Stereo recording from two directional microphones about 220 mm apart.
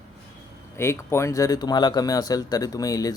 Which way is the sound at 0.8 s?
10° left (ahead or behind).